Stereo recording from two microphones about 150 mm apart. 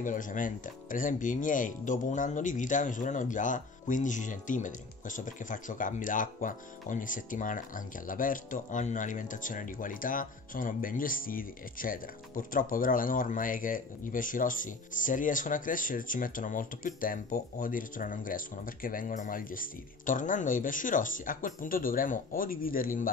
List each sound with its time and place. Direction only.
0.0 s speech: 60° left (ahead or behind)